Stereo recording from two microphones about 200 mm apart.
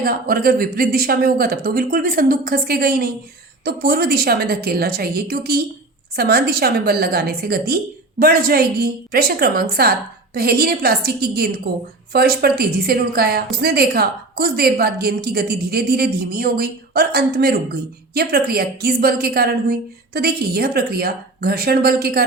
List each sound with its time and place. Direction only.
0.0 s a woman's voice: 45° right (ahead or behind)